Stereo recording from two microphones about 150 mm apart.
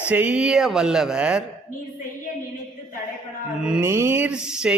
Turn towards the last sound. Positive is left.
turn(degrees=-5)  # may be behind; listen again after turning